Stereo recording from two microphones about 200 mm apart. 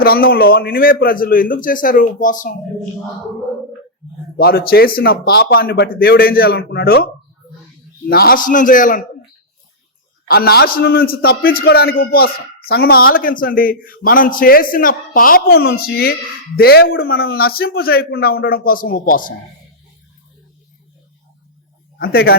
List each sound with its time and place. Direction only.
0.0 s a man's voice: 50° left (ahead or behind)
4.0 s a sound: centre (ahead or behind)
4.4 s a man's voice: 50° left (ahead or behind)
10.2 s a man's voice: 50° left (ahead or behind)
21.9 s speech: 50° left (ahead or behind)